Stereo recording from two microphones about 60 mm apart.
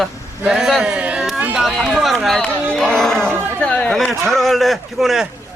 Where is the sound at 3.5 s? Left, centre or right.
Left.